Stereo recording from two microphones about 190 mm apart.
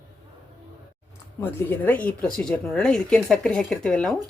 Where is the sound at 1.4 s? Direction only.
10° left (ahead or behind).